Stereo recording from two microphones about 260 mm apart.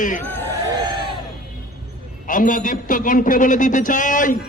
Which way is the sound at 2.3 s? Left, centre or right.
Left.